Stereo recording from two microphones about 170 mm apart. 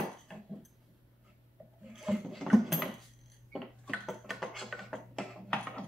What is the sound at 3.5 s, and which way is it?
Music, centre (ahead or behind).